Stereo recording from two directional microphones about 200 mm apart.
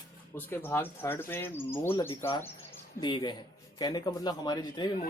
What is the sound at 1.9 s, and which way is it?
A man's voice, 20° left (ahead or behind).